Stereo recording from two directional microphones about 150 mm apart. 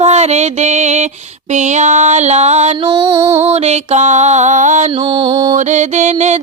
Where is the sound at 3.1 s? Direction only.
20° right (ahead or behind).